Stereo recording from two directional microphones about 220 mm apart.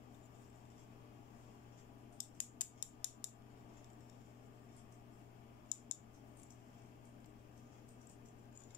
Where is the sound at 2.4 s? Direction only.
20° left (ahead or behind).